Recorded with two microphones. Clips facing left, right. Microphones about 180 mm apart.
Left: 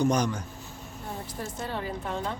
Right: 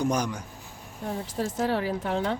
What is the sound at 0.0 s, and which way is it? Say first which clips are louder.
Speech: left 2 dB; 10° right (ahead or behind).